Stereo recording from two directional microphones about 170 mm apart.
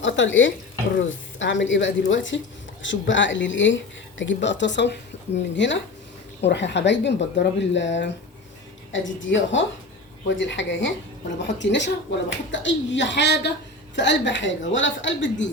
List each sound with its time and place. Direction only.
0.0 s speech: 90° left